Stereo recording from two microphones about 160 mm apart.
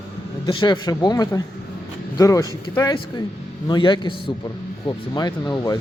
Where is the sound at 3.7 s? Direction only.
30° left (ahead or behind).